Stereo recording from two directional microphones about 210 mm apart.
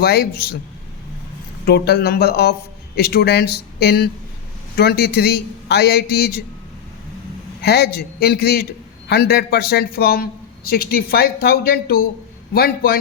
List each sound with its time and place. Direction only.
0.0 s a man's voice: 50° left (ahead or behind)
1.6 s a man's voice: 50° left (ahead or behind)
7.6 s a man's voice: 50° left (ahead or behind)